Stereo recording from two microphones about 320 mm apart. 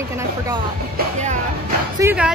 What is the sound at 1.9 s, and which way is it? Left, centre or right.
Speech, centre.